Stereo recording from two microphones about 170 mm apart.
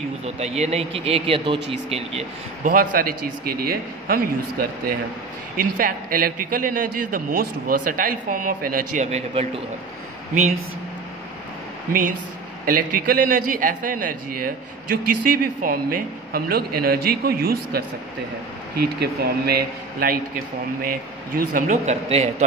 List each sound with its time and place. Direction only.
0.2 s speech: 40° right (ahead or behind)
2.6 s a man's voice: 55° right (ahead or behind); by 9.5 s 40° right (ahead or behind)
12.6 s a man's voice: 55° right (ahead or behind)
18.9 s a man's voice: 65° right (ahead or behind); by 22.3 s 40° right (ahead or behind)